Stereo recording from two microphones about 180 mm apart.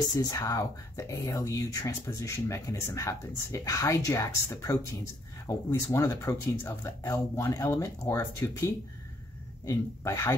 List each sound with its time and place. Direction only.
0.2 s speech: 20° left (ahead or behind)
9.7 s speech: 15° left (ahead or behind)